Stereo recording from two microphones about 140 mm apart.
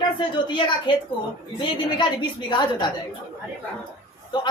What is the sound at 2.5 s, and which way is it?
Speech, 30° left (ahead or behind).